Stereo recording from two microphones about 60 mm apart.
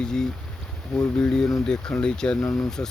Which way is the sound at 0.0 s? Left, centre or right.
Centre.